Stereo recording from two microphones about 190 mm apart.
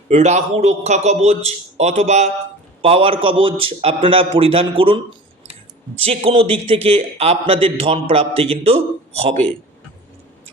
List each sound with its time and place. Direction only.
0.1 s a man's voice: 35° right (ahead or behind)
6.0 s a man's voice: 30° right (ahead or behind)